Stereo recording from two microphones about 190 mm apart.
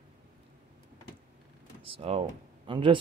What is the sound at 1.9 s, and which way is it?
Speech, 30° right (ahead or behind).